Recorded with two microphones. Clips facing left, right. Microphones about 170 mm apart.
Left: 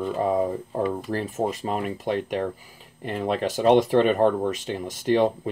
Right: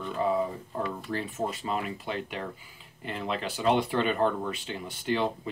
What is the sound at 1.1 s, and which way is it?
Speech, 45° left (ahead or behind).